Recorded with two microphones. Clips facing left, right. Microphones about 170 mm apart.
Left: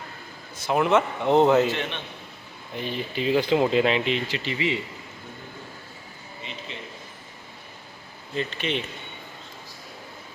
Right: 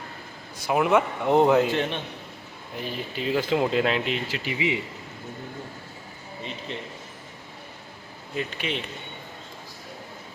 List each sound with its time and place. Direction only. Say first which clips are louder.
0.5 s a man's voice: even; 10° right (ahead or behind)
1.7 s a man's voice: right 4 dB; 35° right (ahead or behind)
2.7 s speech: left 3 dB; 5° right (ahead or behind)
8.4 s a man's voice: left 2 dB; 5° right (ahead or behind)